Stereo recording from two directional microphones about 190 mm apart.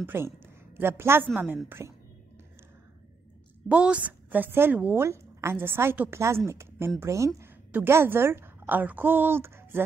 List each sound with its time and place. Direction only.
0.0 s a woman's voice: 10° right (ahead or behind)
3.6 s a woman's voice: 5° right (ahead or behind)